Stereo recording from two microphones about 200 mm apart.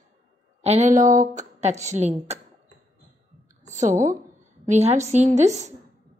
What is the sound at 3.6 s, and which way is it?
A woman's voice, 35° right (ahead or behind).